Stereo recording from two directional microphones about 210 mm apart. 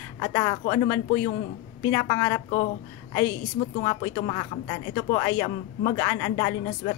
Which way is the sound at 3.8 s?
20° left (ahead or behind).